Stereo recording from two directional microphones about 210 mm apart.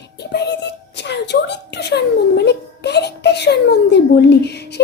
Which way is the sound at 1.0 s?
55° left (ahead or behind).